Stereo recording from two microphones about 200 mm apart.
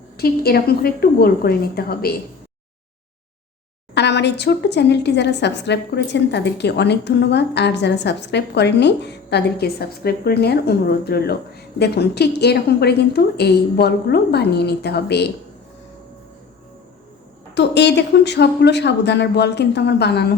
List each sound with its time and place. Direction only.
0.2 s a woman's voice: 50° left (ahead or behind)
3.9 s a woman's voice: 60° left (ahead or behind)
17.5 s a woman's voice: 60° left (ahead or behind)